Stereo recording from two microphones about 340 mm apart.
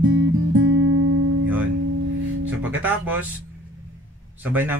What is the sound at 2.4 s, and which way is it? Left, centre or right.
Speech, centre.